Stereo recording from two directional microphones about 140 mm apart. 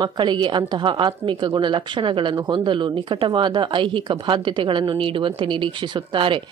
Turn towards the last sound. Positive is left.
turn(degrees=-35)  # may be behind; listen again after turning